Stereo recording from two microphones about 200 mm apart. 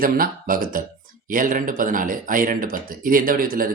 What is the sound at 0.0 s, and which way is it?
Speech, 45° right (ahead or behind).